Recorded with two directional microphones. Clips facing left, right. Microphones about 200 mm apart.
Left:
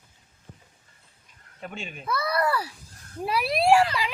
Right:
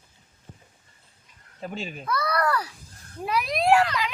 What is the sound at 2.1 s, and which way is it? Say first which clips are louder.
Speech: even; 5° left (ahead or behind).